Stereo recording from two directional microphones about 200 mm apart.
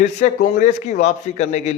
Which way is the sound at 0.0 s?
35° left (ahead or behind).